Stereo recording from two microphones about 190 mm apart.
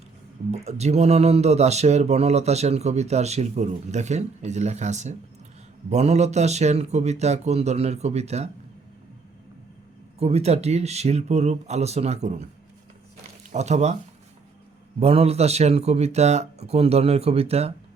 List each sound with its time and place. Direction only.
0.5 s speech: 35° right (ahead or behind)
10.2 s speech: 35° right (ahead or behind)
13.5 s speech: 35° right (ahead or behind)
14.9 s speech: 30° right (ahead or behind)